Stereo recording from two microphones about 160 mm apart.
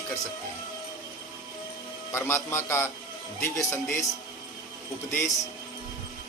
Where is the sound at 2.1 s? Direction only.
15° left (ahead or behind).